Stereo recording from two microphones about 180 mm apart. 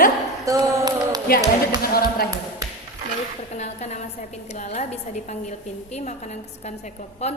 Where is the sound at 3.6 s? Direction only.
40° left (ahead or behind).